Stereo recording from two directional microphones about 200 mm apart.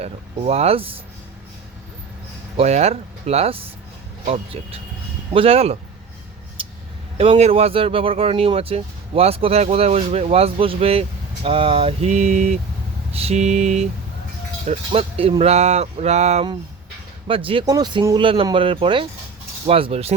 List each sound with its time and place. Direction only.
0.0 s speech: 30° right (ahead or behind)
2.6 s speech: 35° right (ahead or behind)
7.2 s speech: 30° right (ahead or behind)